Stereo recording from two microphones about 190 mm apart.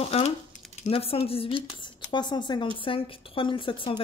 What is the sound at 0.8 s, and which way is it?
A woman's voice, 30° left (ahead or behind).